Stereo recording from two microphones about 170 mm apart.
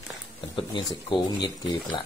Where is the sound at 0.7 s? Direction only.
25° left (ahead or behind).